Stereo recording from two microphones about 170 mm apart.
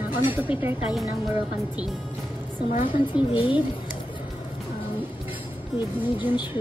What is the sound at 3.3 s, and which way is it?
Speech, 30° left (ahead or behind).